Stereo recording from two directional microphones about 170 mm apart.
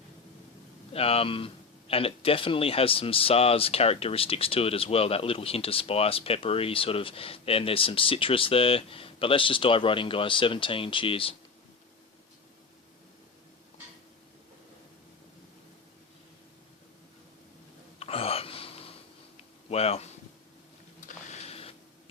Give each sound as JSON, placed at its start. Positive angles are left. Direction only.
{"t": 0.9, "sound": "speech", "side_deg": 35}
{"t": 18.0, "sound": "a sound", "side_deg": 35}
{"t": 21.1, "sound": "printer", "side_deg": 40}